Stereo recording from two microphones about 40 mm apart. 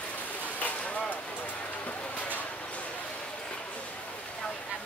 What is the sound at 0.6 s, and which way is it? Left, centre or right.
Vehicle, left.